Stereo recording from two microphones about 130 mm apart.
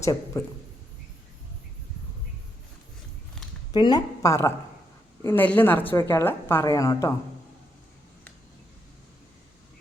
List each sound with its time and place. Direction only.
0.0 s speech: 25° left (ahead or behind)
3.7 s a woman's voice: 35° left (ahead or behind)